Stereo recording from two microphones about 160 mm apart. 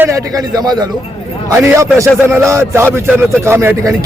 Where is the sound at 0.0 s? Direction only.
20° right (ahead or behind).